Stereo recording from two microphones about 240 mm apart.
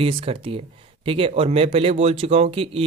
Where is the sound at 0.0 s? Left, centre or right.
Right.